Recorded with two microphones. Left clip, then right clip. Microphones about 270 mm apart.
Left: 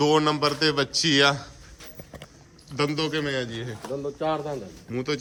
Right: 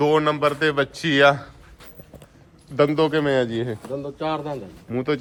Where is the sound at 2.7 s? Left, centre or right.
Centre.